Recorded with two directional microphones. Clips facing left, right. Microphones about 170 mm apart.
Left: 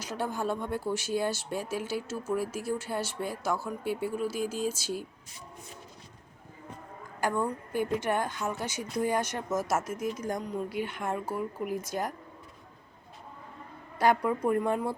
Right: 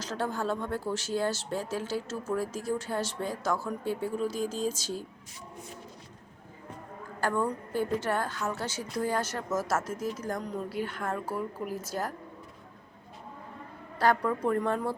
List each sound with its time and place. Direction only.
0.0 s speech: 10° left (ahead or behind)
7.2 s speech: 15° left (ahead or behind)
14.0 s speech: 10° left (ahead or behind)